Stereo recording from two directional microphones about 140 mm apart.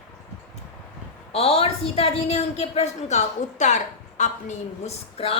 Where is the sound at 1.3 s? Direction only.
45° left (ahead or behind).